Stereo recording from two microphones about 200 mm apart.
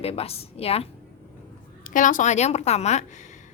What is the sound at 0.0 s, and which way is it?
Speech, 30° left (ahead or behind).